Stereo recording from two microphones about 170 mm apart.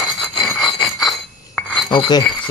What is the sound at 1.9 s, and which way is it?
Speech, 25° left (ahead or behind).